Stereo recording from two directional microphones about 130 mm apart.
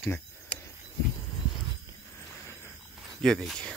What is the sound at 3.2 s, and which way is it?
Speech, 5° left (ahead or behind).